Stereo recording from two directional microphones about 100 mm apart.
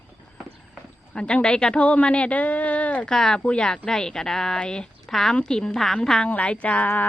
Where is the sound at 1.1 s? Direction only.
10° left (ahead or behind).